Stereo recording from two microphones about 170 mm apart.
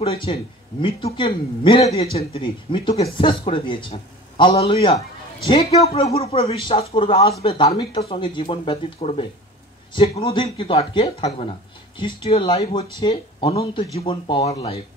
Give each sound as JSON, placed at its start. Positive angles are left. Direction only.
{"t": 0.0, "sound": "a woman's voice", "side_deg": 35}